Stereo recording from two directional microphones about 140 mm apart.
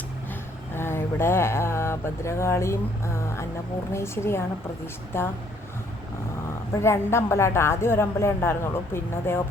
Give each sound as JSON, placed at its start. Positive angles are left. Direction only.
{"t": 0.8, "sound": "a woman's voice", "side_deg": 15}
{"t": 6.7, "sound": "speech", "side_deg": 20}